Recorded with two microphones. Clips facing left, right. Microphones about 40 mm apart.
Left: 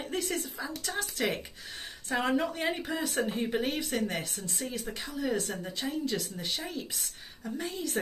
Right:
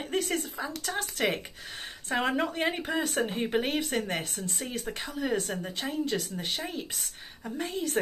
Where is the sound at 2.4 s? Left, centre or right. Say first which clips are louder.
Right 2 dB; right.